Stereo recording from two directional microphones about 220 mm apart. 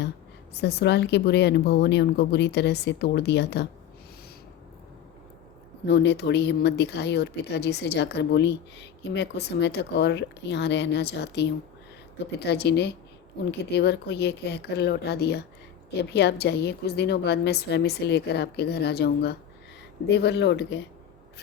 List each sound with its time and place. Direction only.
0.5 s speech: 50° left (ahead or behind)
5.8 s speech: 50° left (ahead or behind)